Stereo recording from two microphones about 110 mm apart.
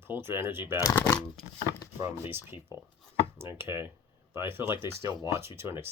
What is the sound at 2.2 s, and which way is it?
Speech, 20° right (ahead or behind).